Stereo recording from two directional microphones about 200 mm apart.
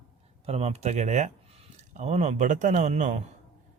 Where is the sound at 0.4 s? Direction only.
30° right (ahead or behind).